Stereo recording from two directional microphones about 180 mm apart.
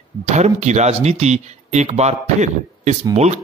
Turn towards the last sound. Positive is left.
turn(degrees=-35)  # may be behind; listen again after turning